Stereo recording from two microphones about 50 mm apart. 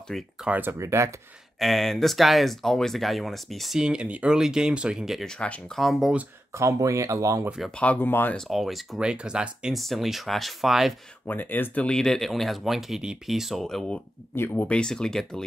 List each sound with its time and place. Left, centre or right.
0.1 s speech: centre
0.7 s speech: right
1.6 s speech: centre
3.7 s speech: centre
6.5 s speech: right
7.7 s speech: left
8.0 s speech: left
8.5 s speech: centre
9.0 s speech: centre
9.8 s speech: centre
11.2 s speech: left
11.9 s speech: centre
14.3 s speech: left
14.7 s speech: centre